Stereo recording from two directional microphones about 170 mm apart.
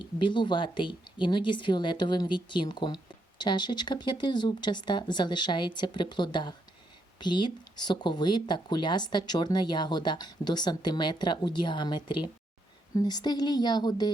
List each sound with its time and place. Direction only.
0.0 s speech: 30° left (ahead or behind)